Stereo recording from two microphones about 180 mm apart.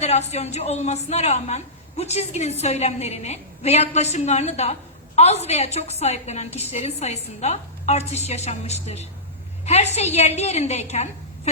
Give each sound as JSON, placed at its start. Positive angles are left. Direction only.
{"t": 0.0, "sound": "a woman's voice", "side_deg": 35}